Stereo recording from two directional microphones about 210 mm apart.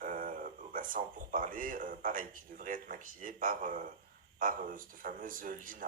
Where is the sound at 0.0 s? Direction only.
40° right (ahead or behind).